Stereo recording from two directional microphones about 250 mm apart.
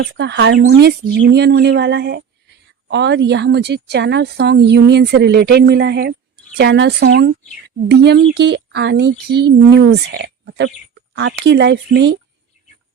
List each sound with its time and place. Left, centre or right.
0.0 s a woman's voice: right